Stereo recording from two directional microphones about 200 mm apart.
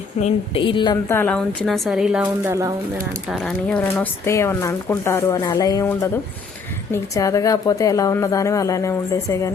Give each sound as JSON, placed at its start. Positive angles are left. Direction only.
{"t": 0.2, "sound": "speech", "side_deg": 25}
{"t": 2.2, "sound": "speech", "side_deg": -15}
{"t": 3.2, "sound": "speech", "side_deg": 0}